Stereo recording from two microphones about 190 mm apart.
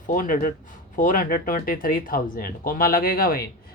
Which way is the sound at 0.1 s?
45° left (ahead or behind).